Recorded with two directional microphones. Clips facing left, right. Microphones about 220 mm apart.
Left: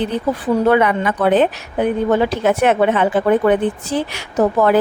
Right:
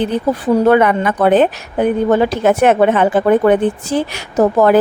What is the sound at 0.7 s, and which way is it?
A woman's voice, 50° right (ahead or behind).